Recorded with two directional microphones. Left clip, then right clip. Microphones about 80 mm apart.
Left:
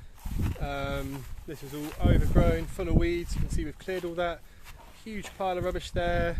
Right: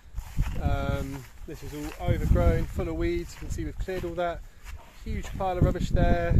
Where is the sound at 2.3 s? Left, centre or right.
Right.